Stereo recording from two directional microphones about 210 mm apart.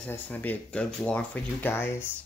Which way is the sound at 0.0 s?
10° left (ahead or behind).